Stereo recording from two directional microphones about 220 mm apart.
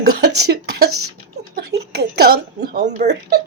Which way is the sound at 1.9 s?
45° right (ahead or behind).